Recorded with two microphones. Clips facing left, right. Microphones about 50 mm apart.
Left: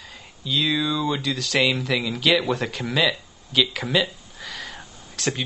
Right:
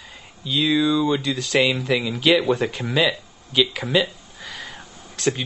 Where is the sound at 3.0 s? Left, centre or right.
Centre.